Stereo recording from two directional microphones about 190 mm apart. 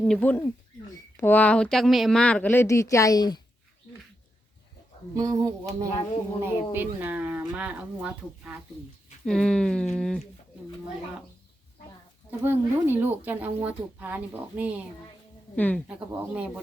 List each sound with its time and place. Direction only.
0.0 s speech: 5° left (ahead or behind); by 3.4 s 20° left (ahead or behind)
5.1 s speech: 20° right (ahead or behind)
9.2 s speech: 5° left (ahead or behind)
12.4 s speech: 10° right (ahead or behind)
15.5 s speech: 10° left (ahead or behind)
15.9 s speech: 5° right (ahead or behind)